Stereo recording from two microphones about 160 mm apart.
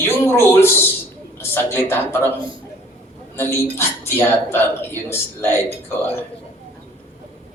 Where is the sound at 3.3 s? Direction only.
15° left (ahead or behind).